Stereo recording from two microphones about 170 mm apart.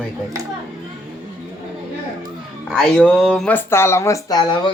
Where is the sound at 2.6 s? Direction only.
5° left (ahead or behind).